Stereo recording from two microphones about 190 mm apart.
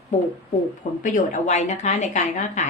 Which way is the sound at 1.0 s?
40° left (ahead or behind).